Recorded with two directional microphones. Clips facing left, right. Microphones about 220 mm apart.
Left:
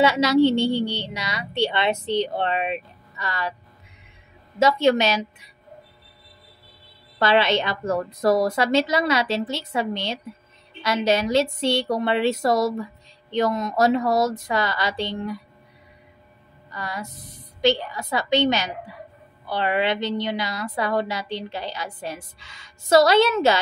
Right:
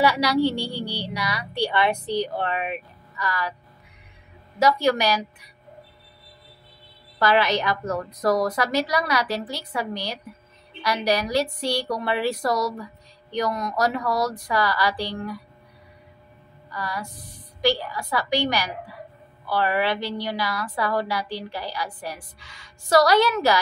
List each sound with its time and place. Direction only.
0.0 s a woman's voice: 25° left (ahead or behind)
4.6 s a woman's voice: 25° left (ahead or behind)
7.2 s a woman's voice: 25° left (ahead or behind)
16.7 s a woman's voice: 20° left (ahead or behind)